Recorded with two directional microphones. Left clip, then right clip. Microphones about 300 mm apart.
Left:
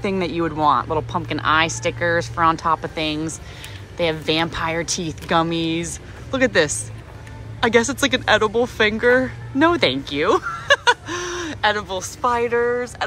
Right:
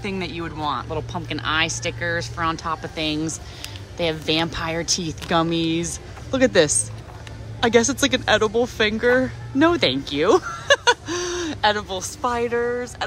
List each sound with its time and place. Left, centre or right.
0.0 s speech: centre